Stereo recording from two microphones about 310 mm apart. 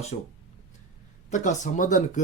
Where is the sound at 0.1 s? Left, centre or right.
Left.